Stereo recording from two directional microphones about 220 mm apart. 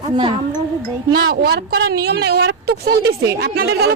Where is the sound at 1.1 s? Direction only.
50° right (ahead or behind).